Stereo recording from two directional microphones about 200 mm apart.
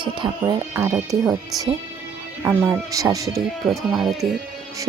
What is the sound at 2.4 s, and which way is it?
Speech, 10° right (ahead or behind).